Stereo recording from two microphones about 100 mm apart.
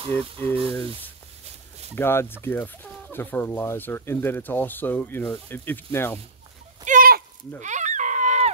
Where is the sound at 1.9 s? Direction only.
25° left (ahead or behind).